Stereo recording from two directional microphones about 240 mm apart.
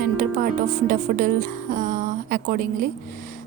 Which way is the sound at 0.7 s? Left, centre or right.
Right.